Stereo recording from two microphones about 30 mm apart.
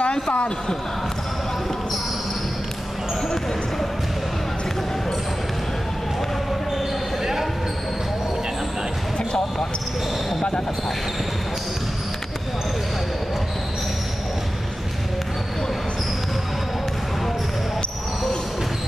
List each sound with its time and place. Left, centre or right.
0.0 s speech: left